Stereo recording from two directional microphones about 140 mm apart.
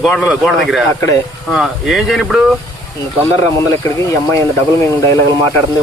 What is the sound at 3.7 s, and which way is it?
Speech, 25° left (ahead or behind).